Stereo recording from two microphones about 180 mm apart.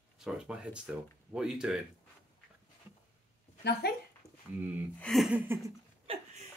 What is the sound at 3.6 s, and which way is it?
Speech, 65° left (ahead or behind).